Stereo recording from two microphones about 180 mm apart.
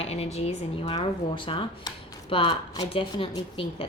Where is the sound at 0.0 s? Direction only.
35° left (ahead or behind).